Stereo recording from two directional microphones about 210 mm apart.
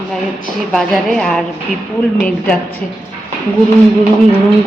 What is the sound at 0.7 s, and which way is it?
Speech, centre (ahead or behind).